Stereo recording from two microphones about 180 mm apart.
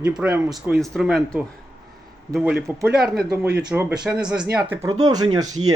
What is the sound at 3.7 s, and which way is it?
Speech, 10° right (ahead or behind).